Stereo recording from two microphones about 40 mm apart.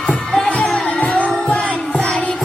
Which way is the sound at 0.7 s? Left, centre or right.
Left.